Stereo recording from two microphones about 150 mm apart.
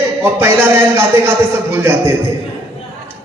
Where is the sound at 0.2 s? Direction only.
15° right (ahead or behind).